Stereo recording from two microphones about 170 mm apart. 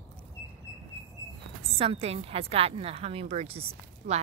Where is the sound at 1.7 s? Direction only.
35° right (ahead or behind).